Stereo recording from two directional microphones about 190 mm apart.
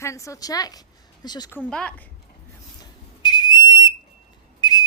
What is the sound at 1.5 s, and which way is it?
Speech, 5° left (ahead or behind).